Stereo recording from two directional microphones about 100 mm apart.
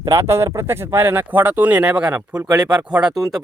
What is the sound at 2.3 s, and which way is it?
Speech, 40° right (ahead or behind).